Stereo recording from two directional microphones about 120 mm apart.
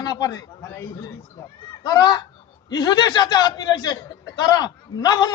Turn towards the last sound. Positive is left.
turn(degrees=35)  # may be behind; listen again after turning